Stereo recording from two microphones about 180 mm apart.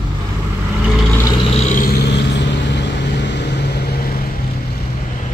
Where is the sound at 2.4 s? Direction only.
75° left (ahead or behind).